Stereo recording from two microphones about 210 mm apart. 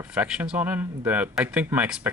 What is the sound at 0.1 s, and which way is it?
Speech, 5° right (ahead or behind).